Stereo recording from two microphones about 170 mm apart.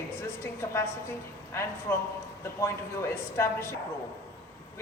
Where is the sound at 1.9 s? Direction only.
15° left (ahead or behind).